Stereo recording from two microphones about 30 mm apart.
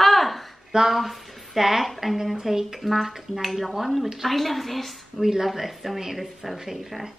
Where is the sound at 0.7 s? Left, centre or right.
Centre.